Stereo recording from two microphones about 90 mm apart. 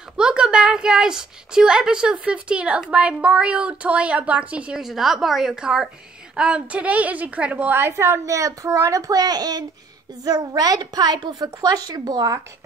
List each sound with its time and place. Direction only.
0.2 s a woman's voice: 10° right (ahead or behind); by 12.4 s 50° right (ahead or behind)